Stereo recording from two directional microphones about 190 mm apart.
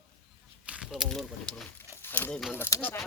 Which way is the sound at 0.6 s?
5° right (ahead or behind).